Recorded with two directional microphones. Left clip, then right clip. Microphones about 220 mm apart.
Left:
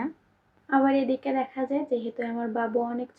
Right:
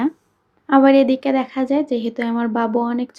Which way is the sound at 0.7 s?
45° right (ahead or behind).